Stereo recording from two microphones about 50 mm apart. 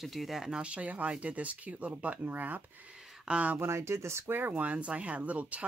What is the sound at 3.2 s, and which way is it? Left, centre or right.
Speech, right.